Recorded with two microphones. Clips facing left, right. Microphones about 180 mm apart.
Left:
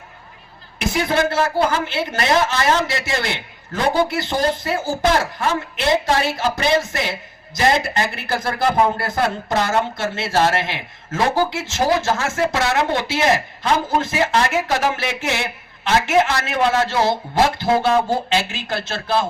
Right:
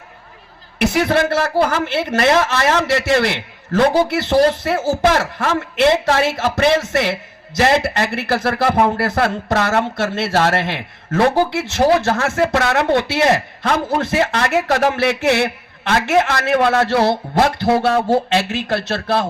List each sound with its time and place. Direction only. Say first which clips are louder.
0.8 s a woman's voice: right 4 dB; 65° right (ahead or behind)